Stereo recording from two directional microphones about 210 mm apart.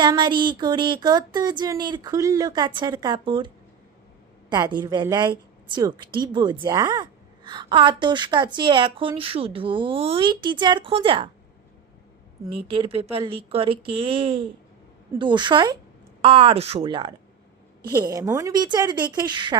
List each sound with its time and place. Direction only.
0.0 s a woman's voice: 20° right (ahead or behind)
12.5 s a woman's voice: 25° right (ahead or behind)